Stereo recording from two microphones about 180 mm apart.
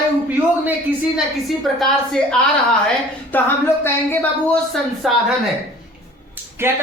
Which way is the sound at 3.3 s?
10° left (ahead or behind).